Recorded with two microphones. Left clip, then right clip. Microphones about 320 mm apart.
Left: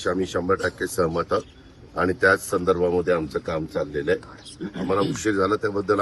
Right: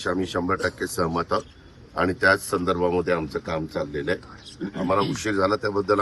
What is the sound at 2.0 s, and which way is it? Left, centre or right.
A man's voice, right.